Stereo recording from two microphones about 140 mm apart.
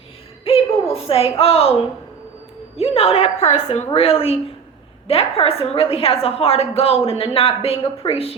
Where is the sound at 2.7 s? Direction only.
45° left (ahead or behind).